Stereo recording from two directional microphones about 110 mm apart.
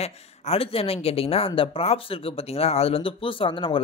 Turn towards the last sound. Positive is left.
turn(degrees=50)  # may be behind; listen again after turning